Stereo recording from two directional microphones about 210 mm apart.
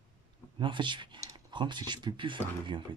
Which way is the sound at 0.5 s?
25° right (ahead or behind).